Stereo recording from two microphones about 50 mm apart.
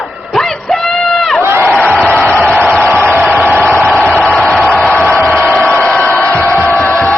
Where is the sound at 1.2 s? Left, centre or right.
Centre.